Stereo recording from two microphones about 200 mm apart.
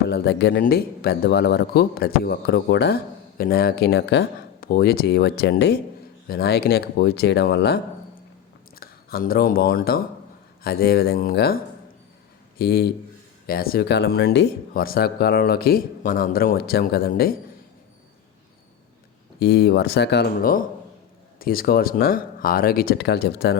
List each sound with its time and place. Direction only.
0.1 s a man's voice: 55° left (ahead or behind)
19.4 s a man's voice: 55° left (ahead or behind)